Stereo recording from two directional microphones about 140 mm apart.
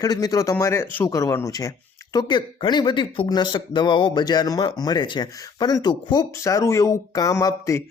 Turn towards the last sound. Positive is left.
turn(degrees=25)  # may be behind; listen again after turning